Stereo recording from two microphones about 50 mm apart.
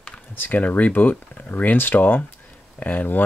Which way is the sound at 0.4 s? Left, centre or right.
Left.